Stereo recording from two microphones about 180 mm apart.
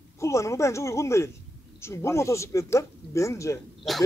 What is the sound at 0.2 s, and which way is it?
Speech, 15° left (ahead or behind).